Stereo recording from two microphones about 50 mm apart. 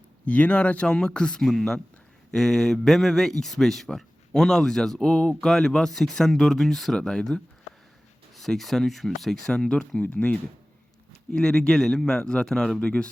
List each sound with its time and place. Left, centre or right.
0.3 s a man's voice: left
8.4 s speech: centre
9.5 s a man's voice: centre